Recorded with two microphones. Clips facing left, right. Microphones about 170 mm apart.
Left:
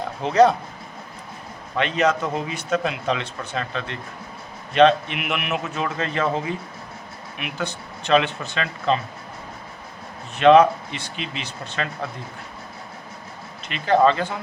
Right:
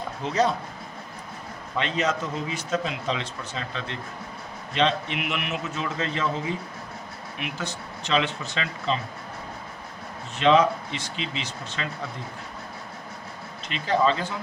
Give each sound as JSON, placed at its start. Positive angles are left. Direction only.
{"t": 0.3, "sound": "speech", "side_deg": 65}
{"t": 1.8, "sound": "speech", "side_deg": 60}
{"t": 10.3, "sound": "speech", "side_deg": 60}
{"t": 13.7, "sound": "speech", "side_deg": 60}